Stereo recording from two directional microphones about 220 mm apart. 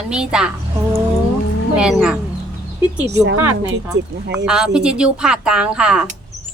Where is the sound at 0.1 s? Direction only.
5° right (ahead or behind).